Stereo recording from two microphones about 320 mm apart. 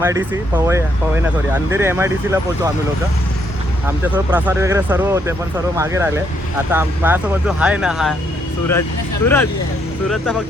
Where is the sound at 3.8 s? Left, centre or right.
Centre.